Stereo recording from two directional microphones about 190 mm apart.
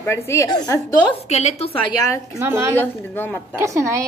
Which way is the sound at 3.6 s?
15° right (ahead or behind).